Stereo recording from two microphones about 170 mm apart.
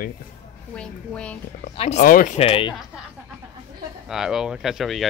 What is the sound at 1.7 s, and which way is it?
Speech, 40° left (ahead or behind).